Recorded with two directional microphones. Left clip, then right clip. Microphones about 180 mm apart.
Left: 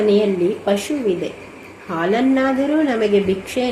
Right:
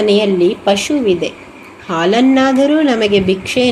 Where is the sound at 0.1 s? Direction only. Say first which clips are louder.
Right 5 dB; 25° right (ahead or behind).